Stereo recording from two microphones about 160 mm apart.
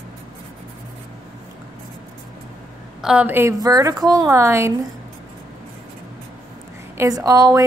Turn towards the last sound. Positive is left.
turn(degrees=-20)  # may be behind; listen again after turning